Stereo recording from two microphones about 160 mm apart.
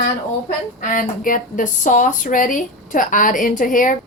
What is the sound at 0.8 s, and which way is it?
A woman's voice, 60° left (ahead or behind).